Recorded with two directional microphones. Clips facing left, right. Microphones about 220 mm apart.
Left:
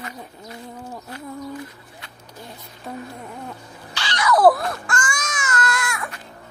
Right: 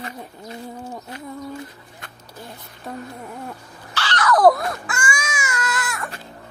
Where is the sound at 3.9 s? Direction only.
15° left (ahead or behind).